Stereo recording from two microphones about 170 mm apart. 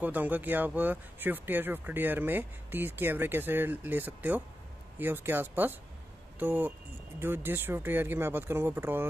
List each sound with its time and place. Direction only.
0.0 s speech: 10° right (ahead or behind)